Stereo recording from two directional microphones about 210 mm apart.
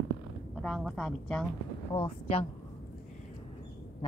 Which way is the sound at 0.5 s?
Centre (ahead or behind).